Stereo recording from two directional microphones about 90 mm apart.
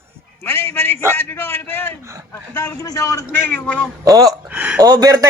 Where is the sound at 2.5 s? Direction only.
30° left (ahead or behind).